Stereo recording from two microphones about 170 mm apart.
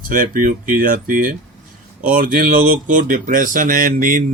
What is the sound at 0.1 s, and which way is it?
Speech, 50° right (ahead or behind).